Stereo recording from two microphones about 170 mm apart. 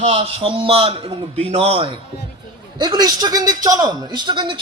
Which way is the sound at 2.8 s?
25° right (ahead or behind).